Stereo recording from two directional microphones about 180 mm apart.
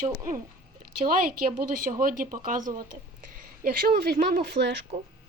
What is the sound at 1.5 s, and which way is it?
A woman's voice, 50° right (ahead or behind).